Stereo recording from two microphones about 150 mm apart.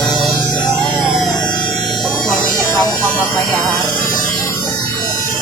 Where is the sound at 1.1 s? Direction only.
Centre (ahead or behind).